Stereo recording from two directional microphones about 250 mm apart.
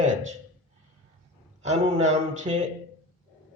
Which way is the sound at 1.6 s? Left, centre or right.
Right.